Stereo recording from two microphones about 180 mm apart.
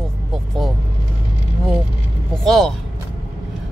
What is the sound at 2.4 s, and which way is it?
Speech, centre (ahead or behind).